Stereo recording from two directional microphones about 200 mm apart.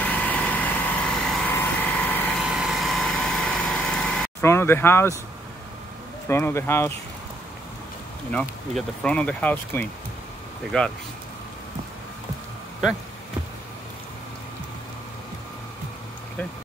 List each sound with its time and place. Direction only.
0.0 s vehicle: 5° left (ahead or behind)
2.4 s vehicle: 5° right (ahead or behind); by 5.1 s 10° left (ahead or behind)
6.2 s speech: 15° left (ahead or behind)
8.3 s speech: 5° left (ahead or behind)